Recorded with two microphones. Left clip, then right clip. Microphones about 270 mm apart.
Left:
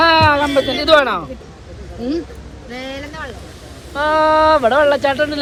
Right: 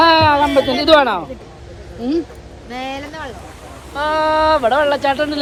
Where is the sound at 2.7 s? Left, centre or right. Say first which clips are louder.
Right 2 dB; right.